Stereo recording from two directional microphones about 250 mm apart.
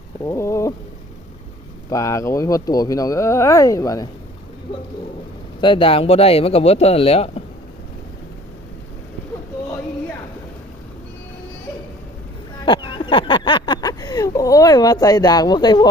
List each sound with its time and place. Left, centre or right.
0.3 s speech: centre
1.9 s speech: centre
5.5 s speech: centre
12.6 s a sound: centre